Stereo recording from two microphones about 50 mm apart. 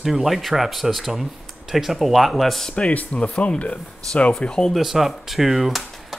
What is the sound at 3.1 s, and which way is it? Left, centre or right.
Speech, left.